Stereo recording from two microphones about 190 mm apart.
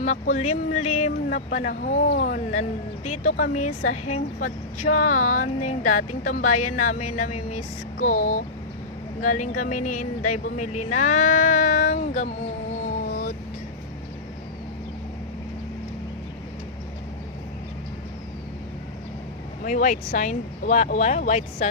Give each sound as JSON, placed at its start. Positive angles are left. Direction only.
{"t": 0.0, "sound": "speech", "side_deg": 40}
{"t": 2.6, "sound": "speech", "side_deg": 35}
{"t": 19.6, "sound": "speech", "side_deg": 45}